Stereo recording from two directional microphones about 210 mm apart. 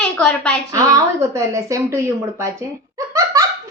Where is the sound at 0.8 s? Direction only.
15° right (ahead or behind).